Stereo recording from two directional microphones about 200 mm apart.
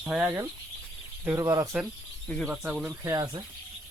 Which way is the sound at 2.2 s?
5° left (ahead or behind).